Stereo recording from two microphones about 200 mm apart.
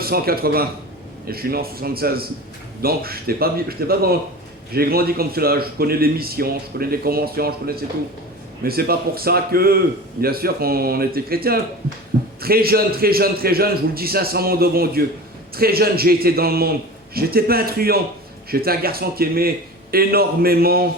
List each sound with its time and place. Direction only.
0.0 s speech: 50° right (ahead or behind)